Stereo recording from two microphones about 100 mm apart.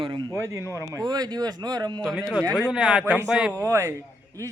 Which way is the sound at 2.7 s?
10° right (ahead or behind).